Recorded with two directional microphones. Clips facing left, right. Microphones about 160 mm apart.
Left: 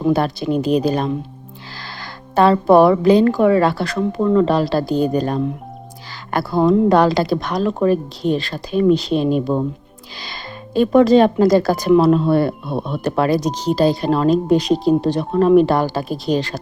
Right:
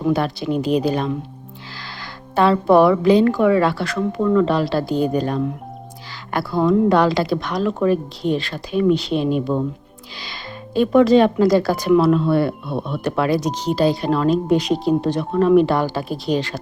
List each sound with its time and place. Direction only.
0.1 s speech: 40° left (ahead or behind)
2.3 s speech: 40° left (ahead or behind)
6.6 s speech: 35° left (ahead or behind)
10.8 s speech: 40° left (ahead or behind)